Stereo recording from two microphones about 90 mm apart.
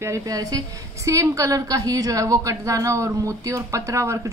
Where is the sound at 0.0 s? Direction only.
40° right (ahead or behind).